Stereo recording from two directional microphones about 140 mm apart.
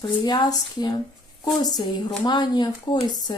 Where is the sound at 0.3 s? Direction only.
30° left (ahead or behind).